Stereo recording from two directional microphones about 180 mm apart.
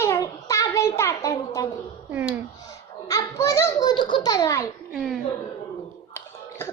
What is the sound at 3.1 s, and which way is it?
A child's voice, 15° left (ahead or behind).